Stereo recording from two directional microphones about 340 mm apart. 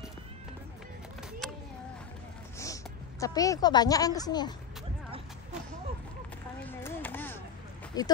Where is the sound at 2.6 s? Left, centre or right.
Centre.